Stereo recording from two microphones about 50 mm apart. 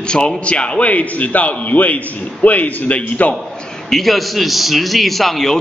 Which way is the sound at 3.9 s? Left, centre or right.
Centre.